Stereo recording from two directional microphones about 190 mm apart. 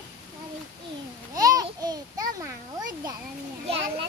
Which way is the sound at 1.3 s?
20° right (ahead or behind).